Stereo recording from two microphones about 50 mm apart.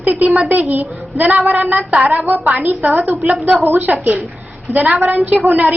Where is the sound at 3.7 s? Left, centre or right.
Right.